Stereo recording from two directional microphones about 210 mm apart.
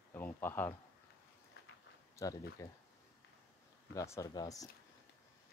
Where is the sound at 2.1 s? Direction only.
15° left (ahead or behind).